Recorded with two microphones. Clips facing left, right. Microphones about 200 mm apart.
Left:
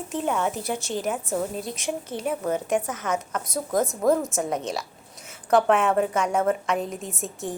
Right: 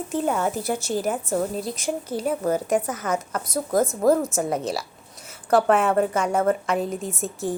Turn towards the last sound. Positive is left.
turn(degrees=0)  # may be behind; listen again after turning